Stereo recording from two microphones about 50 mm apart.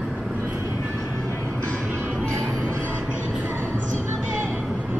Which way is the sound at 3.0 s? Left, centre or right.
Right.